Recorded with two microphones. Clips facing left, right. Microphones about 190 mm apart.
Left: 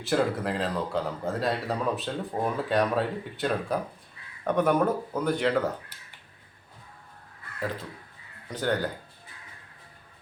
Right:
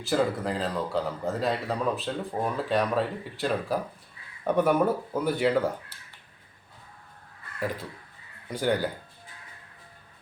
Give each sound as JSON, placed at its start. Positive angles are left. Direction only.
{"t": 0.0, "sound": "speech", "side_deg": 0}
{"t": 8.4, "sound": "speech", "side_deg": -10}